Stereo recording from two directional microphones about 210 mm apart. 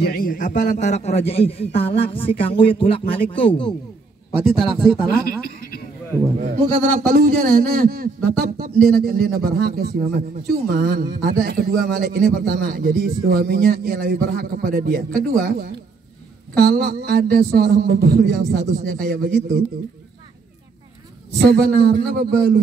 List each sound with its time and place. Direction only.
0.0 s a man's voice: 45° left (ahead or behind); by 3.7 s 25° left (ahead or behind)
4.5 s speech: 5° right (ahead or behind)
6.4 s a man's voice: 35° right (ahead or behind)
7.1 s a man's voice: 45° right (ahead or behind)
16.5 s a man's voice: 45° right (ahead or behind)
21.4 s a man's voice: 50° right (ahead or behind)